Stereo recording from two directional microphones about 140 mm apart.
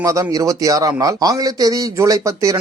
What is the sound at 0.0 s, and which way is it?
A man's voice, 25° right (ahead or behind).